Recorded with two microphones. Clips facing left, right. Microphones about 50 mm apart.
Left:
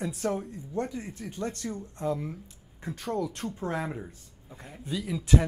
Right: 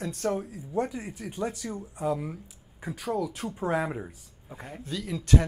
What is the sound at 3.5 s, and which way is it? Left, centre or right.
Speech, centre.